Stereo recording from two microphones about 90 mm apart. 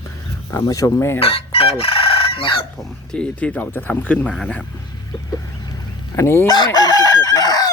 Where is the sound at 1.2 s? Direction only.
90° left.